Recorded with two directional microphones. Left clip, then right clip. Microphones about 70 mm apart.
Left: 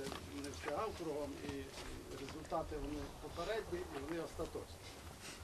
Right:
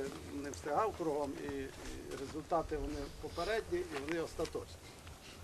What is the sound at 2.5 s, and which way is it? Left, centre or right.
A man's voice, right.